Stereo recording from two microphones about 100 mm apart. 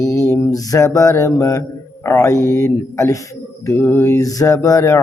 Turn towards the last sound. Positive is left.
turn(degrees=30)  # may be behind; listen again after turning